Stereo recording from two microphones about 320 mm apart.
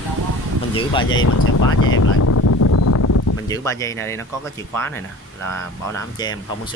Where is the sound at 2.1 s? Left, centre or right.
Left.